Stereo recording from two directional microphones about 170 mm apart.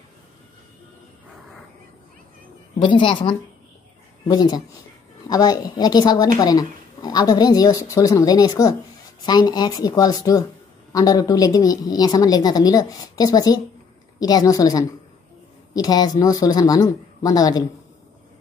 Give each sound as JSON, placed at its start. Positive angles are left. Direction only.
{"t": 2.8, "sound": "a woman's voice", "side_deg": 30}